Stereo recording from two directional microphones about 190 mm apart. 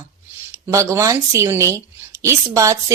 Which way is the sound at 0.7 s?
15° right (ahead or behind).